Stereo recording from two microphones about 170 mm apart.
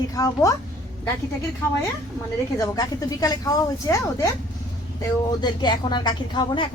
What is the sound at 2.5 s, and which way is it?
Speech, 20° left (ahead or behind).